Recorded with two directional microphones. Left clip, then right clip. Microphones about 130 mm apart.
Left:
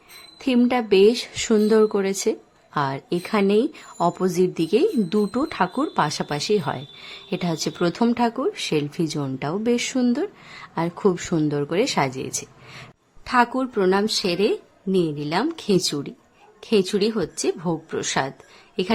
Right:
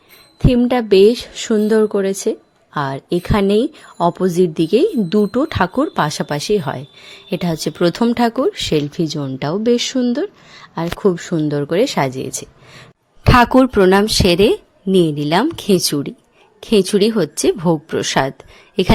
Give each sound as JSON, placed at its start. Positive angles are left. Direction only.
{"t": 0.3, "sound": "a woman's voice", "side_deg": -25}
{"t": 11.5, "sound": "speech", "side_deg": -25}
{"t": 13.2, "sound": "speech", "side_deg": -90}
{"t": 13.9, "sound": "a woman's voice", "side_deg": -70}